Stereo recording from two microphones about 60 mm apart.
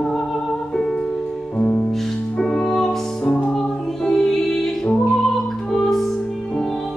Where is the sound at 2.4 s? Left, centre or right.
Centre.